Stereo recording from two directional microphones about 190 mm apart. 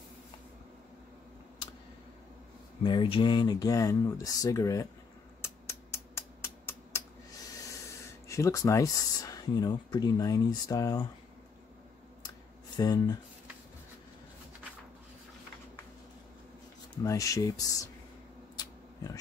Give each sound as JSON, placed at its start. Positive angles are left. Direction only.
{"t": 2.8, "sound": "speech", "side_deg": 25}
{"t": 5.4, "sound": "a sound", "side_deg": 15}
{"t": 7.6, "sound": "speech", "side_deg": 15}
{"t": 12.7, "sound": "speech", "side_deg": 20}
{"t": 17.0, "sound": "speech", "side_deg": 15}